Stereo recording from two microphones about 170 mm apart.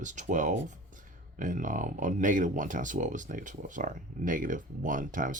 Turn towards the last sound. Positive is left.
turn(degrees=-50)  # may be behind; listen again after turning